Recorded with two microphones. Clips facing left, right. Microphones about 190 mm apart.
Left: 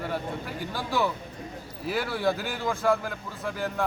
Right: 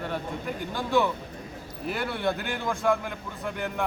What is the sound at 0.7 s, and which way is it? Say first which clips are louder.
Speech: right 3 dB; 5° left (ahead or behind).